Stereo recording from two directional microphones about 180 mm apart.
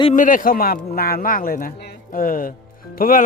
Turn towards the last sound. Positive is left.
turn(degrees=50)  # may be behind; listen again after turning